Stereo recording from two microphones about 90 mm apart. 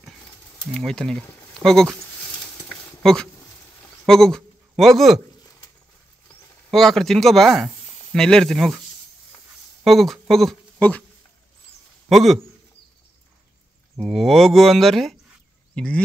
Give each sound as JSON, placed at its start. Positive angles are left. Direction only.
{"t": 0.7, "sound": "speech", "side_deg": 5}
{"t": 2.7, "sound": "a sound", "side_deg": 10}
{"t": 4.0, "sound": "speech", "side_deg": 5}
{"t": 6.7, "sound": "speech", "side_deg": 5}
{"t": 9.8, "sound": "speech", "side_deg": 0}
{"t": 10.8, "sound": "speech", "side_deg": 15}
{"t": 12.1, "sound": "speech", "side_deg": 0}
{"t": 13.9, "sound": "speech", "side_deg": 0}